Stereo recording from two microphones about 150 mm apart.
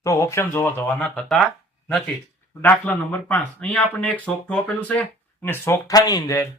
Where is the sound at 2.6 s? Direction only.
10° left (ahead or behind).